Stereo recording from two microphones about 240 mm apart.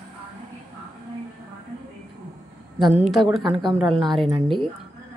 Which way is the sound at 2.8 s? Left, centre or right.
Centre.